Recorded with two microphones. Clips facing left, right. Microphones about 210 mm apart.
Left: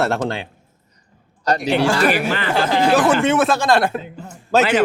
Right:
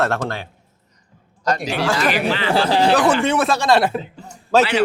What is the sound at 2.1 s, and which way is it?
Speech, 50° left (ahead or behind).